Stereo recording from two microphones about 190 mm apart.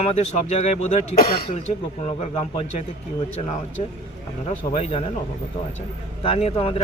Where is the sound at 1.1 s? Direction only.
55° left (ahead or behind).